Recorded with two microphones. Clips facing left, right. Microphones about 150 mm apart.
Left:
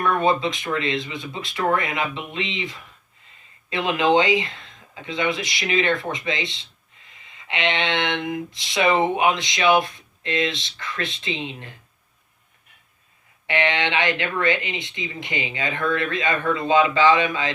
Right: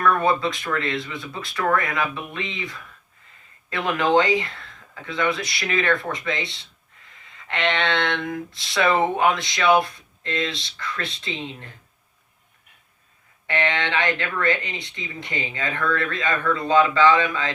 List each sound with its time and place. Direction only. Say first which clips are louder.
0.0 s speech: even; 20° left (ahead or behind)
13.5 s speech: left 1 dB; 20° left (ahead or behind)